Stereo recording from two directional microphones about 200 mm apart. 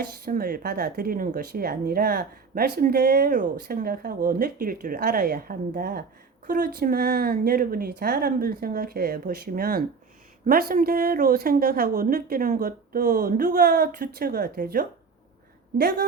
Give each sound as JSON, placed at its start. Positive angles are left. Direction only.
{"t": 0.3, "sound": "speech", "side_deg": -45}